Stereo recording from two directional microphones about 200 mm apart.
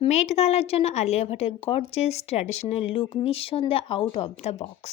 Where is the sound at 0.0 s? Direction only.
35° left (ahead or behind).